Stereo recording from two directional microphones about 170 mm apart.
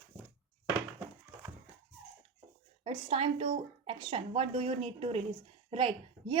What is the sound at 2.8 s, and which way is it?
A woman's voice, 35° right (ahead or behind).